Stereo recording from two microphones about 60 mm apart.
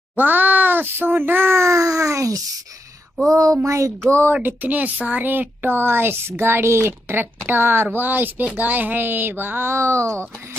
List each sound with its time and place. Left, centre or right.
0.1 s a child's voice: right
1.6 s a child's voice: right
3.3 s a sound: right
4.3 s speech: right